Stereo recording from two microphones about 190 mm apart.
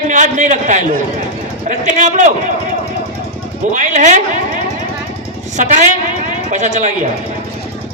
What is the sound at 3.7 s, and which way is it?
Speech, 40° right (ahead or behind).